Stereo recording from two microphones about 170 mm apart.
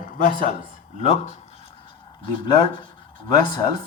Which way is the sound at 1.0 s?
40° left (ahead or behind).